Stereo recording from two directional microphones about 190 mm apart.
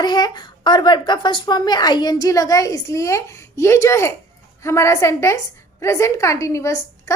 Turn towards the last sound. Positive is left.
turn(degrees=15)  # may be behind; listen again after turning